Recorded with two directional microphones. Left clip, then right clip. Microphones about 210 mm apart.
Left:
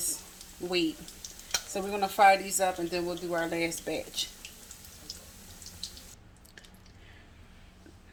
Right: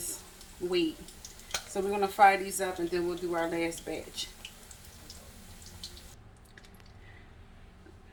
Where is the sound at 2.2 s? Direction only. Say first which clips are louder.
Left 1 dB; 50° left (ahead or behind).